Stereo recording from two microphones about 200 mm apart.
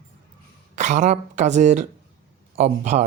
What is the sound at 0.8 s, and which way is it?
Speech, 35° right (ahead or behind).